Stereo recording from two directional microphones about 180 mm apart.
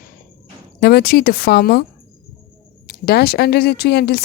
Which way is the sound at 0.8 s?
60° left (ahead or behind).